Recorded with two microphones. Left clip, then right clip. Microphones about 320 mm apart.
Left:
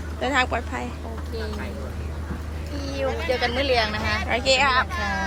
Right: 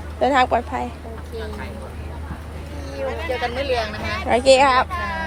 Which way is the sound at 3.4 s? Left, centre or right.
Left.